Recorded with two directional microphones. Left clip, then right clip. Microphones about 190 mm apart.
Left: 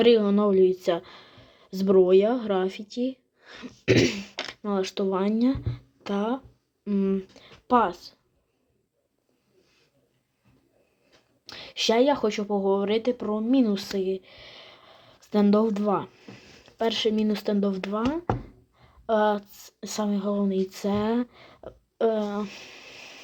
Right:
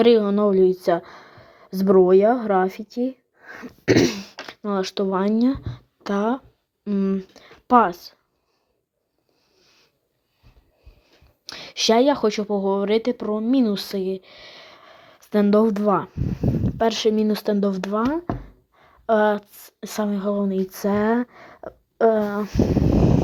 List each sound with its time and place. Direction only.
0.0 s a woman's voice: 30° right (ahead or behind)
11.4 s a woman's voice: 35° right (ahead or behind)